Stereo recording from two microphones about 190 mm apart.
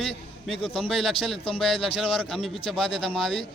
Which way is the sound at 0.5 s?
25° left (ahead or behind).